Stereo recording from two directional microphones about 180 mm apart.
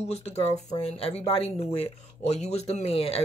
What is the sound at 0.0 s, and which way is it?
Speech, 35° left (ahead or behind).